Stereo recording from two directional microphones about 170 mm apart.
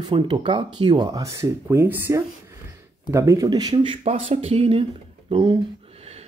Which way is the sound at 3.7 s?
30° right (ahead or behind).